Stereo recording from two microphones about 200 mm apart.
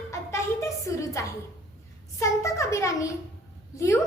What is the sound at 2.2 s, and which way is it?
Speech, 15° left (ahead or behind).